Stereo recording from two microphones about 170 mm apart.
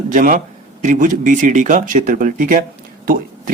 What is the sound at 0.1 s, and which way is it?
Speech, 55° right (ahead or behind).